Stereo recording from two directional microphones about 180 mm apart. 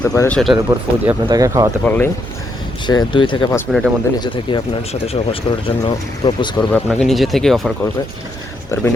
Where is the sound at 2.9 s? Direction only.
25° left (ahead or behind).